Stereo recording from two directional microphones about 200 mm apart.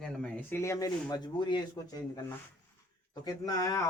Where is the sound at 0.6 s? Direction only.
15° left (ahead or behind).